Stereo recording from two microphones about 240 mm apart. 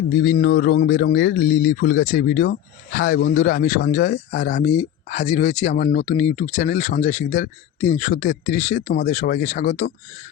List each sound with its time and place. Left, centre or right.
0.1 s speech: left